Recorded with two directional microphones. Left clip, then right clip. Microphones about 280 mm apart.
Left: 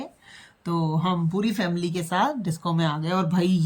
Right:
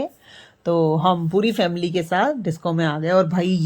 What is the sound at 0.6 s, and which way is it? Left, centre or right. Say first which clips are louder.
A woman's voice: right 9 dB; centre.